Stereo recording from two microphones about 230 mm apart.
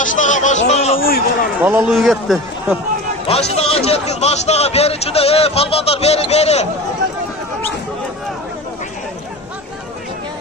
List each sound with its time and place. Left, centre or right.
0.0 s a sound: left
1.6 s a man's voice: centre
3.3 s a man's voice: left